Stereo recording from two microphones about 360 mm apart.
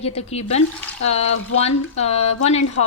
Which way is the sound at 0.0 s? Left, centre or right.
Centre.